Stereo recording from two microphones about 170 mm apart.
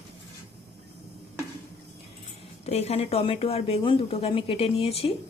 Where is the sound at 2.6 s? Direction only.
40° left (ahead or behind).